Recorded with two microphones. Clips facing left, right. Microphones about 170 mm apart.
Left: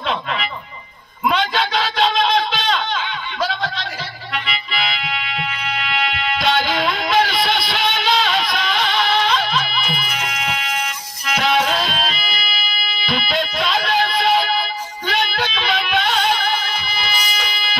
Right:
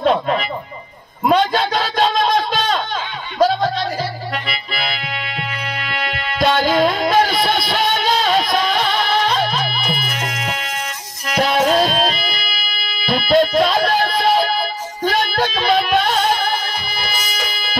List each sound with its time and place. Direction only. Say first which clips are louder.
0.0 s speech: right 7 dB; 45° right (ahead or behind)
1.2 s a sound: right 4 dB; 45° right (ahead or behind)
4.3 s music: right 1 dB; 45° right (ahead or behind)